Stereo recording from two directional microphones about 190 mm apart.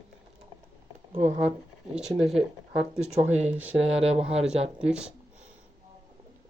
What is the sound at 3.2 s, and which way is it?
Speech, 35° right (ahead or behind).